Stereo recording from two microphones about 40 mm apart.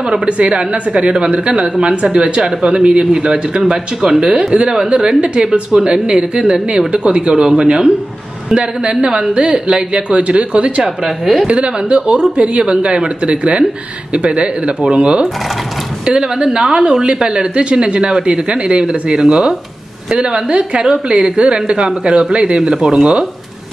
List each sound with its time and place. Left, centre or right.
0.1 s speech: right
4.3 s speech: right
11.1 s a woman's voice: centre
11.4 s speech: right; by 23.0 s centre